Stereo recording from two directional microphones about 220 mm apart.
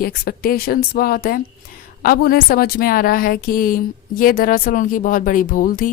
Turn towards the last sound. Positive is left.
turn(degrees=40)  # may be behind; listen again after turning